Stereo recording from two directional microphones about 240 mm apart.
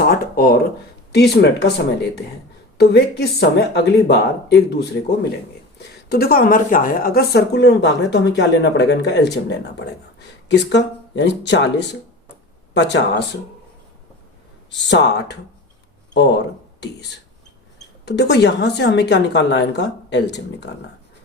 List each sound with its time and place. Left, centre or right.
0.3 s a woman's voice: left
6.1 s a woman's voice: left
14.7 s a woman's voice: left
18.0 s a woman's voice: left